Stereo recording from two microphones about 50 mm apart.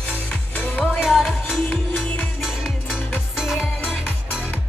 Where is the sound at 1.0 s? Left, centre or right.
Centre.